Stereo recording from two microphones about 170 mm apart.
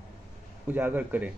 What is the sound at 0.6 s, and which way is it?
Speech, 10° right (ahead or behind).